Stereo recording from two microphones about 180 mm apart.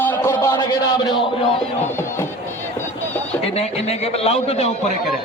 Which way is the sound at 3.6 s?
35° left (ahead or behind).